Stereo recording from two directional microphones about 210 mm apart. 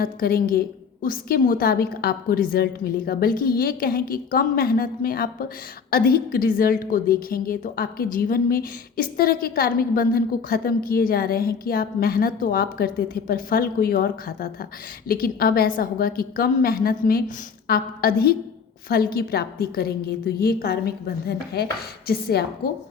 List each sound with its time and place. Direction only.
0.0 s a woman's voice: 45° left (ahead or behind)